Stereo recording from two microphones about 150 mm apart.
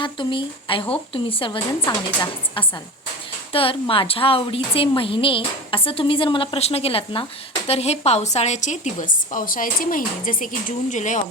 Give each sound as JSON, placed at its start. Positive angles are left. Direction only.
{"t": 0.0, "sound": "a woman's voice", "side_deg": 35}
{"t": 3.5, "sound": "a woman's voice", "side_deg": 40}